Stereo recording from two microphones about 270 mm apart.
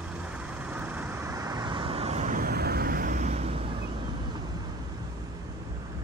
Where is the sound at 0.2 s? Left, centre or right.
Centre; by 3.6 s right.